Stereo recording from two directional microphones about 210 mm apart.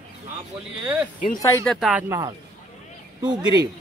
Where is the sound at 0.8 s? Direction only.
5° right (ahead or behind).